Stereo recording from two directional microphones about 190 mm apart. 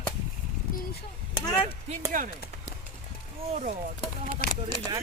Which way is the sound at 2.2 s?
45° right (ahead or behind).